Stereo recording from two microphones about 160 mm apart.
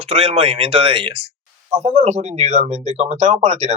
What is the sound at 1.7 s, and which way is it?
Speech, 45° right (ahead or behind).